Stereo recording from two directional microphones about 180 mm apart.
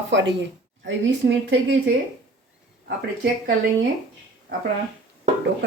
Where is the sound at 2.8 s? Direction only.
70° right (ahead or behind).